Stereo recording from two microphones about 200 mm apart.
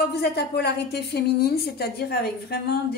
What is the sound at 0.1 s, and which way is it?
A woman's voice, 55° left (ahead or behind).